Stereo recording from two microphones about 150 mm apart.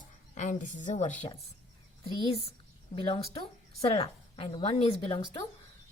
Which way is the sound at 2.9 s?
40° left (ahead or behind).